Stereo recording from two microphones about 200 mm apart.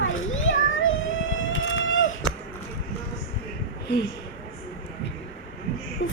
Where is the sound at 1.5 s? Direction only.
75° left (ahead or behind).